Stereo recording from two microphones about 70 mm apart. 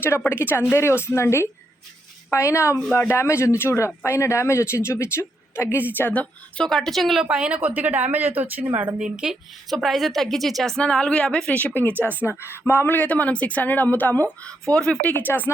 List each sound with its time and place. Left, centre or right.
0.3 s a woman's voice: left
6.0 s speech: left
6.7 s a woman's voice: centre
7.3 s speech: centre; by 8.9 s right
9.0 s speech: centre
9.6 s a woman's voice: centre; by 11.9 s left
11.9 s speech: right
12.2 s speech: left
14.7 s speech: centre
15.3 s speech: left